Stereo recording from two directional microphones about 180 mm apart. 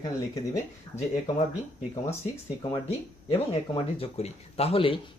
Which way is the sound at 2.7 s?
30° left (ahead or behind).